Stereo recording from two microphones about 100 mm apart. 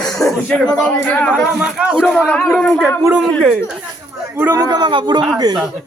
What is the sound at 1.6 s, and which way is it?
Speech, 10° right (ahead or behind).